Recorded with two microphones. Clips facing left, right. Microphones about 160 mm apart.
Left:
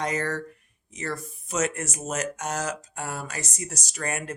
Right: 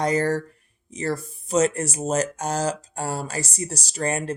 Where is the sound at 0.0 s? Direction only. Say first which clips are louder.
Right 6 dB; 35° right (ahead or behind).